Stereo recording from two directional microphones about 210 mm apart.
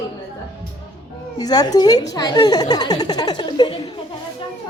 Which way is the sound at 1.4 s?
20° left (ahead or behind).